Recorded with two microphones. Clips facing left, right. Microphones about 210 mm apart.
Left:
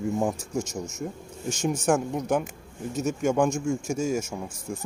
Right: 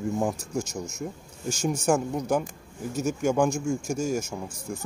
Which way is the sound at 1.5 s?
5° left (ahead or behind).